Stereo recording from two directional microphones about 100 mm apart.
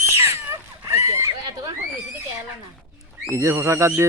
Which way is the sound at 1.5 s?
40° right (ahead or behind).